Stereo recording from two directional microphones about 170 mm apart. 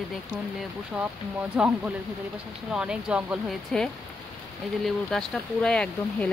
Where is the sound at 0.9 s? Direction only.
5° right (ahead or behind).